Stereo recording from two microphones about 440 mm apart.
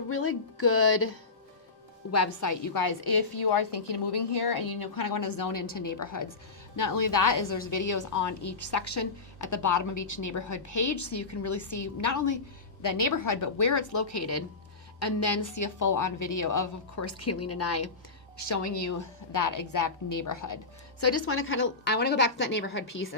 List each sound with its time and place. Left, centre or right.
0.1 s a woman's voice: left
2.1 s a woman's voice: left
21.0 s a woman's voice: left